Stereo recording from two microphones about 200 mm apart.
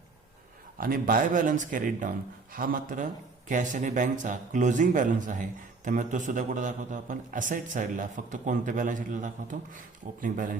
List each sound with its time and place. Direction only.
0.8 s a man's voice: 45° right (ahead or behind)